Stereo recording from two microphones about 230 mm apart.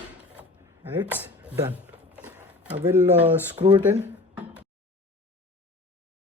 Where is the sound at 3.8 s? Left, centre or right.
Centre.